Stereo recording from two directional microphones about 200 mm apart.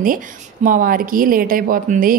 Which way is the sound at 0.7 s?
45° right (ahead or behind).